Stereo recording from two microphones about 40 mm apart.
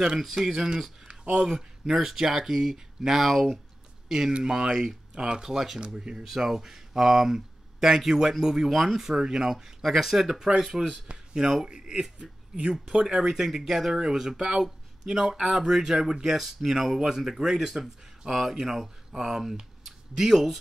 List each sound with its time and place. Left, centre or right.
0.2 s speech: centre
1.0 s a sound: right
1.4 s speech: centre
4.1 s speech: centre
13.2 s speech: centre